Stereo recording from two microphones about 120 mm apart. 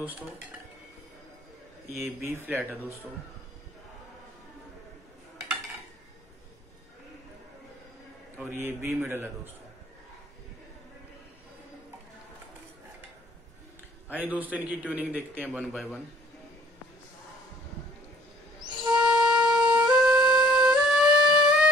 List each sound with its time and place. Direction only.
0.0 s a man's voice: 15° right (ahead or behind)
2.0 s a man's voice: 20° right (ahead or behind)
8.5 s a man's voice: 20° right (ahead or behind)
14.0 s a man's voice: 15° right (ahead or behind)
18.9 s flute: 5° right (ahead or behind)